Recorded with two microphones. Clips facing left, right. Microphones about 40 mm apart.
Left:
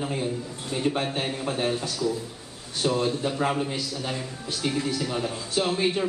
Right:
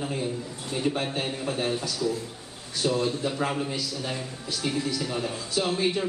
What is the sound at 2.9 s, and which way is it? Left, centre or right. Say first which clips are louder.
Speech: left 1 dB; centre.